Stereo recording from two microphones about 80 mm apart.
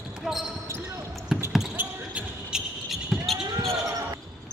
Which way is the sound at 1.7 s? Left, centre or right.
Right.